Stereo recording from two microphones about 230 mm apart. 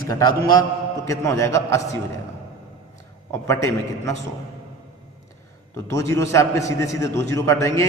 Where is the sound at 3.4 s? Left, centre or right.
Centre.